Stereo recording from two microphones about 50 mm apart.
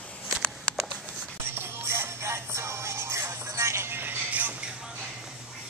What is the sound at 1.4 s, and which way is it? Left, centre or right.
Music, right.